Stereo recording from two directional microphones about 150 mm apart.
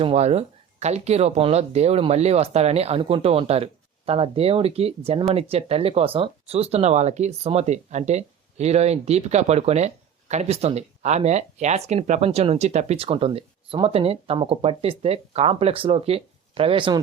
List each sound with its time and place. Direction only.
0.0 s speech: 45° right (ahead or behind)